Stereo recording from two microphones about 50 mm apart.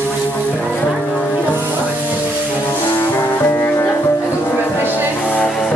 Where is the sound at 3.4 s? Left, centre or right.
Left.